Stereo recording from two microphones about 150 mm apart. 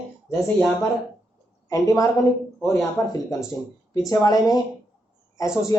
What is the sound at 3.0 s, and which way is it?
A man's voice, 20° left (ahead or behind).